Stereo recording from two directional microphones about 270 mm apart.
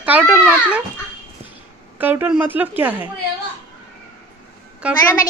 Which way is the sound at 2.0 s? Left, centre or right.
Centre.